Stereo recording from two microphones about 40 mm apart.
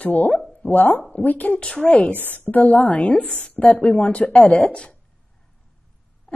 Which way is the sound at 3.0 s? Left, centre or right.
Left.